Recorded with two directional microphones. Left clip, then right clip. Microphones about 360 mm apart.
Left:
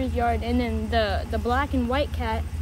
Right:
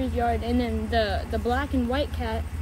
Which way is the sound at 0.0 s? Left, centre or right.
Centre.